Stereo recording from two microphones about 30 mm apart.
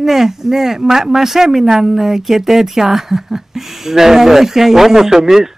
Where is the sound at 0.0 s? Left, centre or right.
Centre.